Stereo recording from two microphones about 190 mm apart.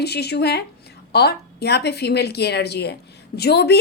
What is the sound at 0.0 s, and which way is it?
Speech, 60° left (ahead or behind).